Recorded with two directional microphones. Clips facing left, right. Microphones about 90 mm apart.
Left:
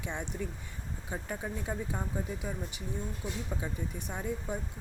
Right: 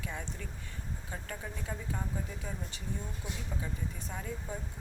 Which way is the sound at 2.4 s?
10° left (ahead or behind).